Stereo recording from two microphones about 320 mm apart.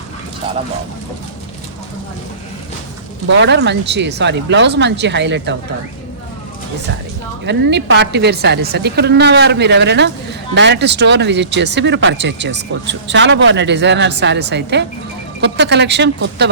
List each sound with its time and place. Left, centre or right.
3.2 s speech: right
7.4 s speech: right